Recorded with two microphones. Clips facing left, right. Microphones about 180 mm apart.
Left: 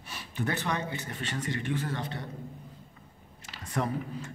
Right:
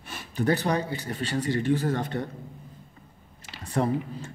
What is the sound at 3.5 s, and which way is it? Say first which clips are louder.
Speech: right 6 dB; 30° right (ahead or behind).